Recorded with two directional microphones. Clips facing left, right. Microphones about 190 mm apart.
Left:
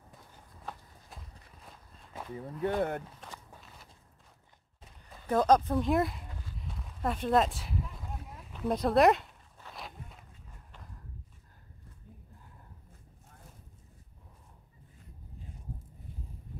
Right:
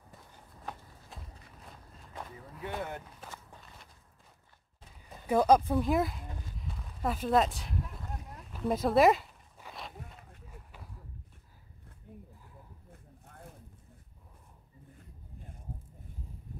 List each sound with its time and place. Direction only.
1.1 s walk: centre (ahead or behind)
2.6 s speech: 55° left (ahead or behind)
3.3 s walk: 5° left (ahead or behind)
5.1 s speech: 10° right (ahead or behind)
6.6 s a sound: centre (ahead or behind)